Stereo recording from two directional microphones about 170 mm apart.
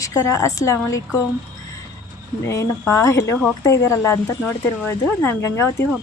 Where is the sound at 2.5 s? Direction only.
20° left (ahead or behind).